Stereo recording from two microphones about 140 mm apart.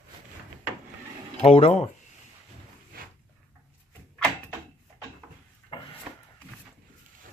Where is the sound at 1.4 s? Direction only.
45° left (ahead or behind).